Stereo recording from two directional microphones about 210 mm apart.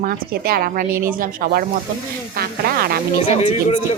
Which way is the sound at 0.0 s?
45° right (ahead or behind).